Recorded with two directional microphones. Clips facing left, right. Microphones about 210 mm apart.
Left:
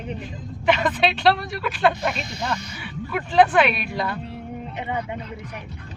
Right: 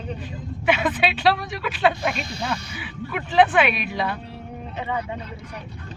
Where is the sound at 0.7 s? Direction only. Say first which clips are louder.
Left 1 dB; 5° right (ahead or behind).